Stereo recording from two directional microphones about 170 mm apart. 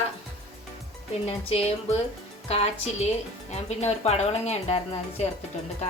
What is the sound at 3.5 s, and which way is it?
Speech, 40° left (ahead or behind).